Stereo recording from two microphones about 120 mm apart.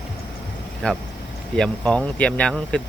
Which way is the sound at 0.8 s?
10° left (ahead or behind).